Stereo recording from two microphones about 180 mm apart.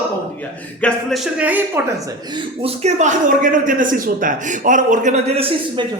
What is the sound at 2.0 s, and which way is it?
Speech, 25° right (ahead or behind).